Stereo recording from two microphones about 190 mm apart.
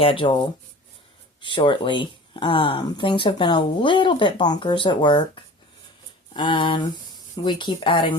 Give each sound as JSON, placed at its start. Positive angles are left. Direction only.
{"t": 0.0, "sound": "speech", "side_deg": 30}